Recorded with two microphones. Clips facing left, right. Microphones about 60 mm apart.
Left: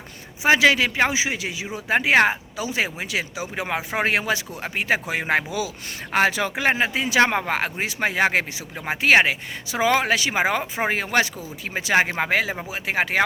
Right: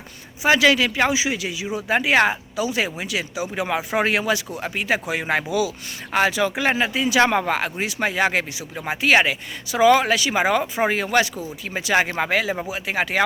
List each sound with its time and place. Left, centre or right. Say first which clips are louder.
0.4 s a man's voice: even; left